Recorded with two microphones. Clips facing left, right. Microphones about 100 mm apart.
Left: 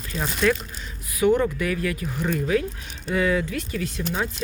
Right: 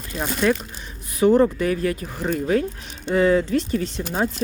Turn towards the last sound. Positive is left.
turn(degrees=-35)  # may be behind; listen again after turning